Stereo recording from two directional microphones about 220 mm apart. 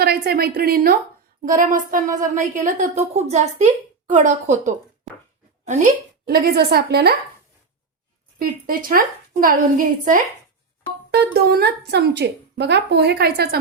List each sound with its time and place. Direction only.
0.0 s a woman's voice: 45° right (ahead or behind)
5.1 s a sound: centre (ahead or behind)
5.6 s a woman's voice: 40° right (ahead or behind)
8.4 s a woman's voice: 40° right (ahead or behind)